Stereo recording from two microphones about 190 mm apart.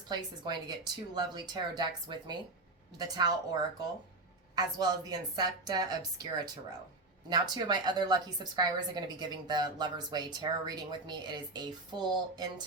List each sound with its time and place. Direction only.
0.1 s a woman's voice: 20° right (ahead or behind)
4.5 s a woman's voice: 20° right (ahead or behind)
7.3 s a woman's voice: 20° right (ahead or behind)